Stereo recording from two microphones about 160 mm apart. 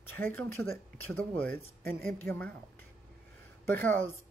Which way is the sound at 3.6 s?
15° left (ahead or behind).